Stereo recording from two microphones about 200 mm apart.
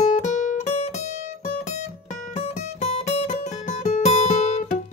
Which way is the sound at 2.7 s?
35° left (ahead or behind).